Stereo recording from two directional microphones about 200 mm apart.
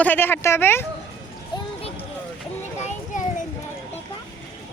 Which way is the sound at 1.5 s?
30° left (ahead or behind).